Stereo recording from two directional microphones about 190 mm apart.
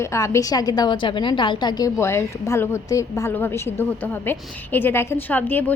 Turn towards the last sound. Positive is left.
turn(degrees=10)  # may be behind; listen again after turning